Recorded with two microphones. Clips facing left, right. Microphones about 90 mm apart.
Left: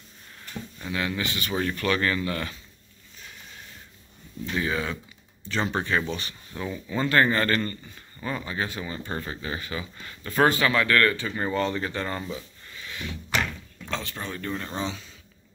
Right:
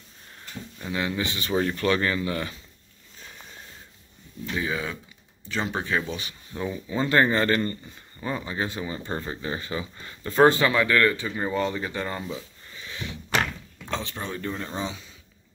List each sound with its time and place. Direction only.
0.9 s speech: 25° right (ahead or behind)
4.6 s speech: 5° right (ahead or behind); by 10.7 s 25° right (ahead or behind)
10.7 s speech: 15° right (ahead or behind)
12.7 s a sound: 25° right (ahead or behind)
13.8 s speech: 20° right (ahead or behind)